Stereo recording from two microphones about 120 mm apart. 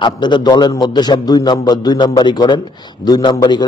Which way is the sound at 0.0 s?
40° left (ahead or behind).